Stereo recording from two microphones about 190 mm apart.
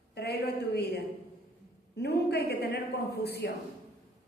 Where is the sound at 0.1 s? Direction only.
60° left (ahead or behind).